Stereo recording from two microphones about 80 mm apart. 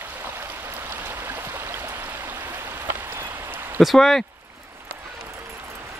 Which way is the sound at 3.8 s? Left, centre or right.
Centre.